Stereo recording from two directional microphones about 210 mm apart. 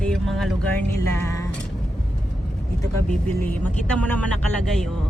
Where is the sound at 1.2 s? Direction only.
15° left (ahead or behind).